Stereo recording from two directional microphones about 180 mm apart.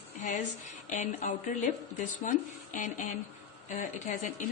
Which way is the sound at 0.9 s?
45° left (ahead or behind).